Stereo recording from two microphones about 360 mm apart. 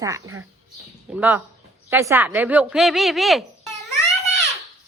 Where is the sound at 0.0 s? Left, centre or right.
Centre.